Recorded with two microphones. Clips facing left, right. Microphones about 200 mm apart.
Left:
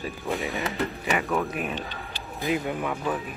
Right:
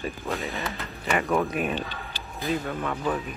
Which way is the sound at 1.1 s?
Centre (ahead or behind).